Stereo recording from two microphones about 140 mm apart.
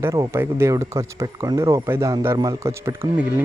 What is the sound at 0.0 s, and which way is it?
Speech, 20° right (ahead or behind).